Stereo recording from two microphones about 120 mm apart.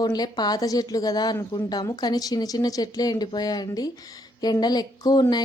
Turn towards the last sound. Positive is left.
turn(degrees=35)  # may be behind; listen again after turning